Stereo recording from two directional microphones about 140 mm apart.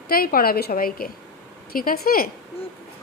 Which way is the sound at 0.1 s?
90° left.